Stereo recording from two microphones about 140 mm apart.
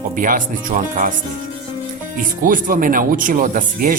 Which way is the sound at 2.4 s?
75° right (ahead or behind).